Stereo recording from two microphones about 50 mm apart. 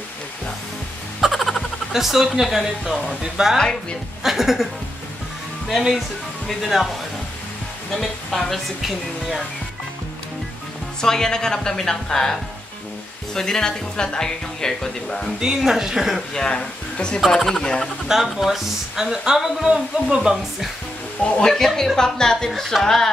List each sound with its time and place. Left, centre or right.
1.2 s speech: centre
3.2 s speech: centre
5.7 s speech: centre
7.9 s speech: centre
11.0 s a woman's voice: centre
15.4 s speech: centre
16.3 s speech: centre
17.2 s a woman's voice: centre
18.0 s speech: centre
21.2 s a woman's voice: centre